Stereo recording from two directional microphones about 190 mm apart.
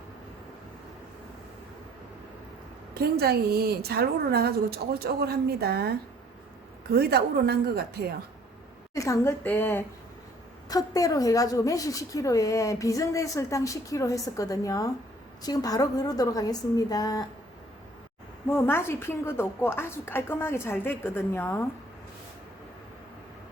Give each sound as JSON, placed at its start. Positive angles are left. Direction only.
{"t": 2.9, "sound": "a woman's voice", "side_deg": -55}
{"t": 6.9, "sound": "a woman's voice", "side_deg": -55}
{"t": 9.0, "sound": "a woman's voice", "side_deg": 15}
{"t": 18.5, "sound": "a woman's voice", "side_deg": 10}